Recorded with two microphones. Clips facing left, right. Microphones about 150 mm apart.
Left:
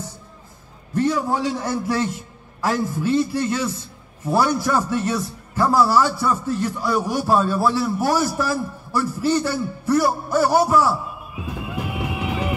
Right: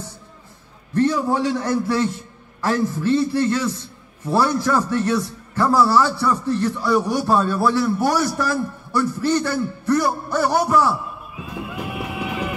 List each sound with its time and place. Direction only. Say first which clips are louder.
0.9 s a man's voice: right 2 dB; 10° left (ahead or behind)
11.7 s music: left 3 dB; 20° left (ahead or behind)